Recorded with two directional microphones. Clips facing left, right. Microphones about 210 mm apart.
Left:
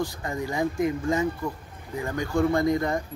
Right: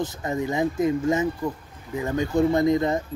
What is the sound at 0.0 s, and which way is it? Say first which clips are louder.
Speech: right 3 dB; 20° right (ahead or behind).